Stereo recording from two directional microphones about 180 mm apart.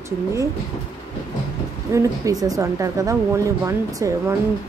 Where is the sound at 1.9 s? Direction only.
20° right (ahead or behind).